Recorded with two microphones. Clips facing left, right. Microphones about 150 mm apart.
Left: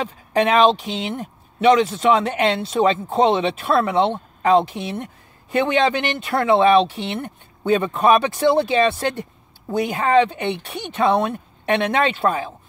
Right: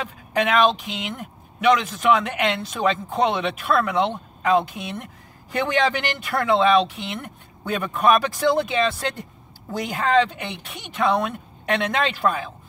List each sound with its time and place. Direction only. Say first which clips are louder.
0.0 s speech: left 4 dB; 30° left (ahead or behind)